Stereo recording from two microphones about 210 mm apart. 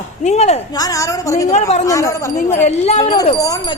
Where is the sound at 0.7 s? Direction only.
15° left (ahead or behind).